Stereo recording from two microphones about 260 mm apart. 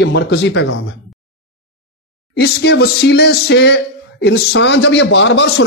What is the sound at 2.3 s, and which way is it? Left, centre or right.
Speech, left.